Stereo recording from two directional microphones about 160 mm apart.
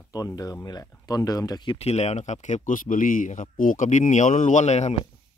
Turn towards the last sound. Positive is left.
turn(degrees=45)  # may be behind; listen again after turning